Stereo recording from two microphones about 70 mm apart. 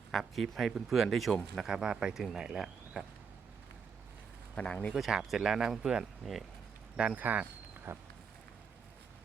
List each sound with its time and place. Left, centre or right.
0.1 s speech: centre
4.5 s speech: centre
4.9 s speech: centre
7.2 s speech: right
7.9 s a sound: right